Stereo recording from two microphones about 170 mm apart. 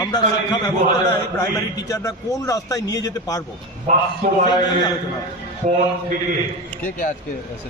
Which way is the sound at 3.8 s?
45° right (ahead or behind).